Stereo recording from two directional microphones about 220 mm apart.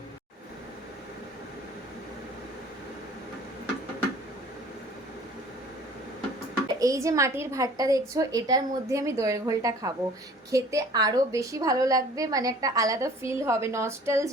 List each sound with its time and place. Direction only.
6.5 s a woman's voice: 15° right (ahead or behind)